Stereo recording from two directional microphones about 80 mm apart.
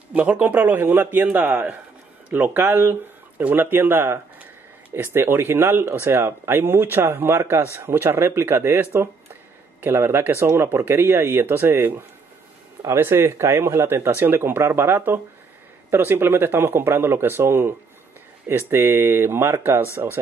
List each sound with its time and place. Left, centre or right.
0.1 s speech: centre